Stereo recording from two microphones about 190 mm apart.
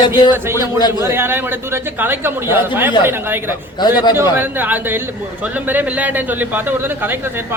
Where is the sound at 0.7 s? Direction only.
20° left (ahead or behind).